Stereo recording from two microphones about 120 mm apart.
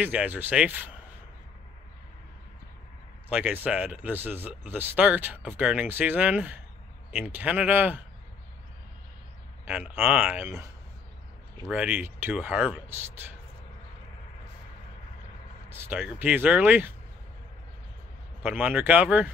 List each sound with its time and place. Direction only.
0.0 s speech: 15° right (ahead or behind)
3.3 s speech: 10° right (ahead or behind)
9.7 s speech: 15° right (ahead or behind)
11.7 s speech: 15° right (ahead or behind)
15.7 s speech: 15° right (ahead or behind)
18.4 s speech: 15° right (ahead or behind)